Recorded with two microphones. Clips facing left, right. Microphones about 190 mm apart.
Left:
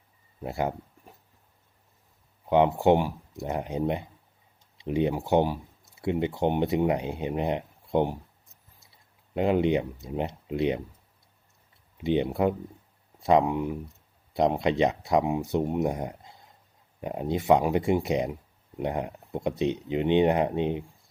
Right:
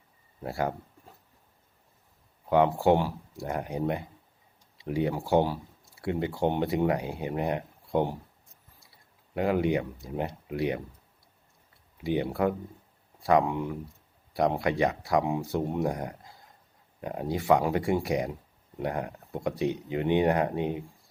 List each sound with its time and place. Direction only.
0.4 s speech: 20° left (ahead or behind)
2.5 s speech: 20° left (ahead or behind)
9.3 s speech: 20° left (ahead or behind)
11.9 s speech: 20° left (ahead or behind)